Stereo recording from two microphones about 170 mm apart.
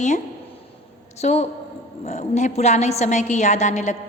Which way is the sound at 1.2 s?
40° left (ahead or behind).